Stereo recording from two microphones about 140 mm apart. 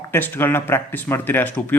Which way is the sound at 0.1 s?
15° left (ahead or behind).